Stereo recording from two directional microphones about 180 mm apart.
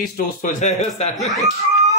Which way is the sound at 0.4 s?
45° left (ahead or behind).